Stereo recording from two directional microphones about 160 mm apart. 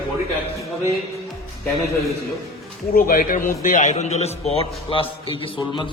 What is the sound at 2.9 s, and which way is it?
A man's voice, 60° left (ahead or behind).